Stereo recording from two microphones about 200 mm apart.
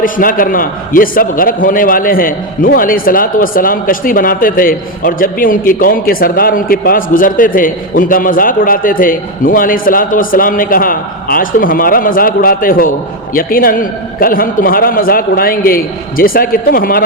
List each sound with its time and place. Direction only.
0.0 s a man's voice: 45° left (ahead or behind)